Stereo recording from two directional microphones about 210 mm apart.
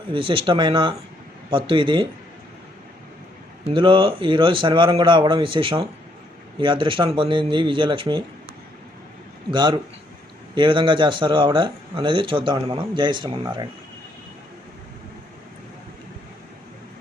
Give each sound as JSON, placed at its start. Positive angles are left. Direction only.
{"t": 0.1, "sound": "a man's voice", "side_deg": -25}
{"t": 3.6, "sound": "a man's voice", "side_deg": -25}
{"t": 9.5, "sound": "a man's voice", "side_deg": -20}